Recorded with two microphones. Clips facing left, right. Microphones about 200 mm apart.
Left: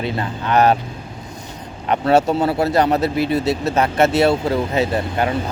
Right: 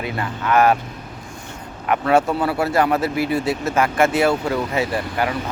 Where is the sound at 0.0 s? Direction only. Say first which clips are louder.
Left 2 dB; 25° left (ahead or behind).